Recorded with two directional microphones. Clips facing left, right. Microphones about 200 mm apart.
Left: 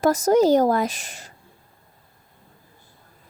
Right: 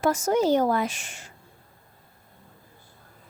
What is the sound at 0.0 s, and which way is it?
A child's voice, 40° left (ahead or behind).